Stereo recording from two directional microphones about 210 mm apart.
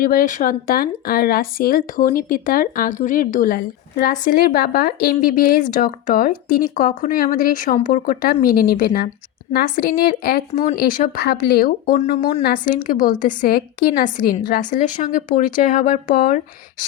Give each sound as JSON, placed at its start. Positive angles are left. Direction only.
{"t": 0.0, "sound": "speech", "side_deg": 40}